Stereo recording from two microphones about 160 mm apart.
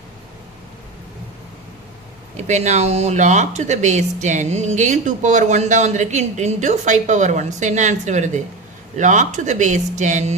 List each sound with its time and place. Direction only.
2.3 s speech: 45° right (ahead or behind)